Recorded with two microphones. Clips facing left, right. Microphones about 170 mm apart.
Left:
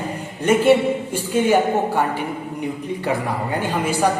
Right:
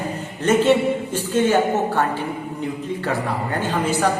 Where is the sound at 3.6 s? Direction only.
10° left (ahead or behind).